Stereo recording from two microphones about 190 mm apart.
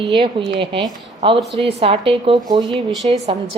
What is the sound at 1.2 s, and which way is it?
A woman's voice, 30° right (ahead or behind).